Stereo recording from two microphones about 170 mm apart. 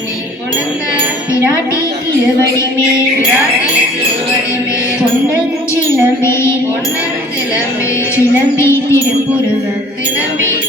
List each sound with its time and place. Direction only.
1.3 s speech: 15° left (ahead or behind)
6.2 s a woman's voice: 15° left (ahead or behind)
8.1 s a woman's voice: 15° left (ahead or behind)